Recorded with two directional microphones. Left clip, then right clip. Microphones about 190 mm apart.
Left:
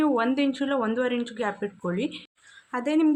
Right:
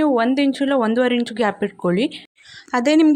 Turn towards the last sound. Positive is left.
turn(degrees=-30)  # may be behind; listen again after turning